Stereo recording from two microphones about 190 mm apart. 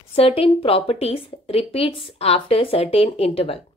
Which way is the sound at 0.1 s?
30° left (ahead or behind).